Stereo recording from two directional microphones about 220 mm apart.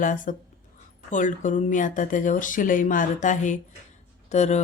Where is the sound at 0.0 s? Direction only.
35° left (ahead or behind).